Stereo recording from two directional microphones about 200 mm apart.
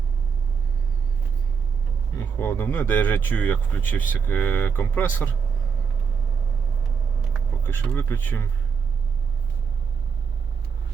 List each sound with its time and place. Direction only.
2.1 s speech: 10° left (ahead or behind)
7.3 s speech: 10° left (ahead or behind)